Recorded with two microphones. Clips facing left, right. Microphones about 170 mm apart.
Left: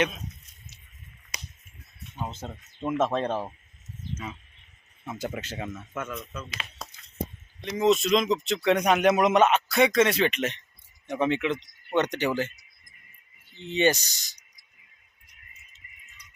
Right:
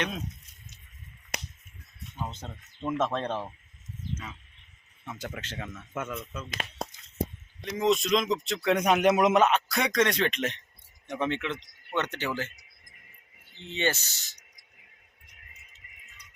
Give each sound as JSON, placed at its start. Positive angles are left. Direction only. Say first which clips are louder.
{"t": 1.3, "sound": "a sound", "louder": "right 5 dB", "side_deg": -60}
{"t": 2.3, "sound": "speech", "louder": "left 4 dB", "side_deg": 5}
{"t": 5.0, "sound": "speech", "louder": "left 5 dB", "side_deg": 10}
{"t": 5.9, "sound": "speech", "louder": "right 3 dB", "side_deg": -20}
{"t": 6.5, "sound": "speech", "louder": "right 5 dB", "side_deg": -50}
{"t": 7.6, "sound": "speech", "louder": "left 3 dB", "side_deg": 0}
{"t": 13.7, "sound": "speech", "louder": "left 6 dB", "side_deg": 15}